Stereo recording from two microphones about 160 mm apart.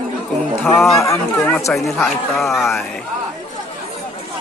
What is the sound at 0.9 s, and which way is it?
Speech, 20° left (ahead or behind).